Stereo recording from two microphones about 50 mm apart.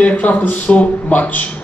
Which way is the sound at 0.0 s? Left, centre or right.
Left.